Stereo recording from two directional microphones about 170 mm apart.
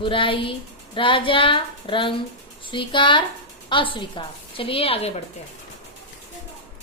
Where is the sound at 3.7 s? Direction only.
30° left (ahead or behind).